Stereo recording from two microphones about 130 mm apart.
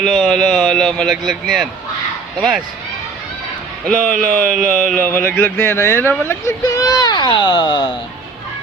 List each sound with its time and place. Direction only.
0.0 s speech: 5° left (ahead or behind)
3.8 s speech: centre (ahead or behind)
5.1 s speech: 15° left (ahead or behind); by 7.9 s 35° left (ahead or behind)